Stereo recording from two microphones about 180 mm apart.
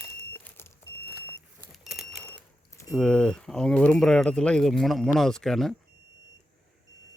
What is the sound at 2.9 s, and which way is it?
Speech, 5° left (ahead or behind).